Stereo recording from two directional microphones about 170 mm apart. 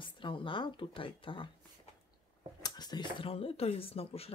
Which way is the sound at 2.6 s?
25° left (ahead or behind).